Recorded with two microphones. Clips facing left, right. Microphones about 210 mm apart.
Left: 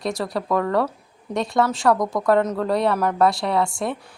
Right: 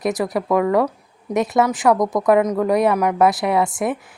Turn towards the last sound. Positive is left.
turn(degrees=-20)  # may be behind; listen again after turning